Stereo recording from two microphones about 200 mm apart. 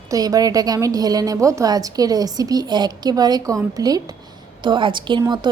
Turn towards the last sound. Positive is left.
turn(degrees=-20)  # may be behind; listen again after turning